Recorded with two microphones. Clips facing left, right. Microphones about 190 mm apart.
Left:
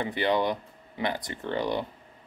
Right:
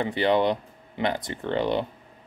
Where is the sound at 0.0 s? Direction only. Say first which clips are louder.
Right 4 dB; 20° right (ahead or behind).